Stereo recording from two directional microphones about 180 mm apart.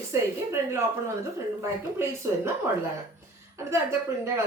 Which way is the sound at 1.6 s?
15° right (ahead or behind).